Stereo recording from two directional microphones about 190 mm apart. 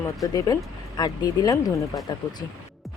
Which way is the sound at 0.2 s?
20° left (ahead or behind).